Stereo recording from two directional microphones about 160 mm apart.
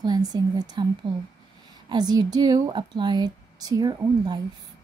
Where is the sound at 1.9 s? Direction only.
25° right (ahead or behind).